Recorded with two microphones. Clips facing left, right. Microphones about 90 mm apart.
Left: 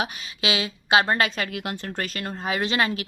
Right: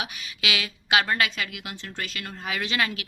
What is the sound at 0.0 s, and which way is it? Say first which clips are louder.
Speech: left 4 dB; 30° left (ahead or behind).